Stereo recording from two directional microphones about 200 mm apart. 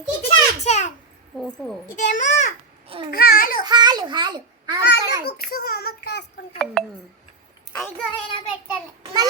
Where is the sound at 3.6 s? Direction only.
20° right (ahead or behind).